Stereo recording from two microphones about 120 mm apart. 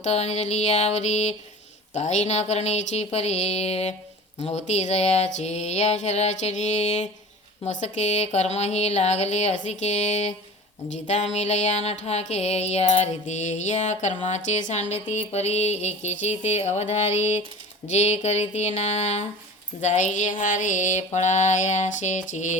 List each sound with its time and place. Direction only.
0.0 s music: 65° left (ahead or behind)
2.0 s a sound: 70° left (ahead or behind)
4.4 s music: 70° left (ahead or behind)
19.8 s mantra: 85° left